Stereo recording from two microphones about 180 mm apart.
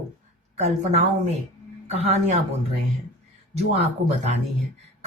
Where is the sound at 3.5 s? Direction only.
35° right (ahead or behind).